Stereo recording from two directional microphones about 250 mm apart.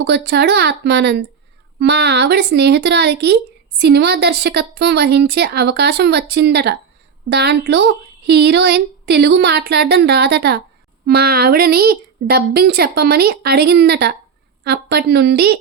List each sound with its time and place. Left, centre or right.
0.0 s a woman's voice: right